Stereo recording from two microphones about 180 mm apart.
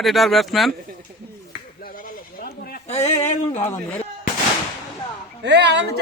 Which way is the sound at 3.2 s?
40° left (ahead or behind).